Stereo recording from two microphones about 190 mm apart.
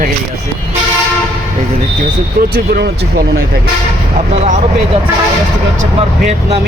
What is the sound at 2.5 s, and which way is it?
Speech, 60° right (ahead or behind).